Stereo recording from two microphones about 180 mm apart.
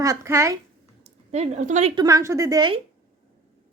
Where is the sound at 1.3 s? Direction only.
40° right (ahead or behind).